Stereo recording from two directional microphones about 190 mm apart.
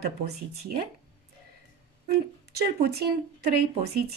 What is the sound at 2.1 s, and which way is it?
A woman's voice, 55° right (ahead or behind).